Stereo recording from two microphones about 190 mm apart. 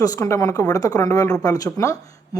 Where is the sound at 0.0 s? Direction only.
20° left (ahead or behind).